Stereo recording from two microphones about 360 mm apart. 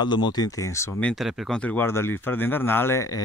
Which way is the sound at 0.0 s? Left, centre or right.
Centre.